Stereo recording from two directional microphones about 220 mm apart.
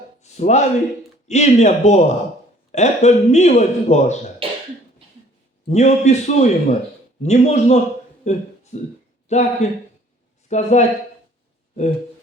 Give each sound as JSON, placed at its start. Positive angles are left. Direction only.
{"t": 0.2, "sound": "a sound", "side_deg": 30}
{"t": 1.3, "sound": "speech", "side_deg": 30}
{"t": 4.4, "sound": "cough", "side_deg": -25}
{"t": 5.6, "sound": "speech", "side_deg": 30}
{"t": 8.2, "sound": "a sound", "side_deg": 30}
{"t": 9.3, "sound": "speech", "side_deg": 30}